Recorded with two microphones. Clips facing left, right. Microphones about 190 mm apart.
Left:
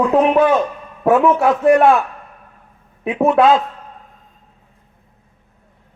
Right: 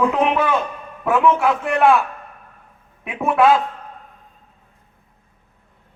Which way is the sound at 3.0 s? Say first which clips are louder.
Left 3 dB; 25° left (ahead or behind).